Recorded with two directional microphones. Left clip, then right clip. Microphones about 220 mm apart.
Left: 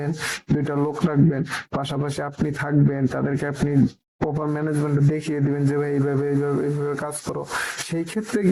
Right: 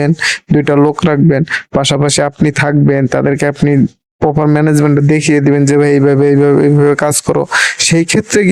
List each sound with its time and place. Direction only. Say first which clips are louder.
0.7 s speech: right 15 dB; 50° right (ahead or behind)